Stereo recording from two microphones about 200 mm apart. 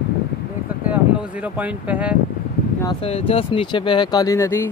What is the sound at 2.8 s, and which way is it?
Speech, 30° left (ahead or behind).